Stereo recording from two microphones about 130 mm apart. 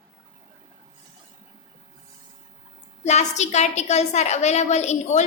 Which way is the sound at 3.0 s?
60° left (ahead or behind).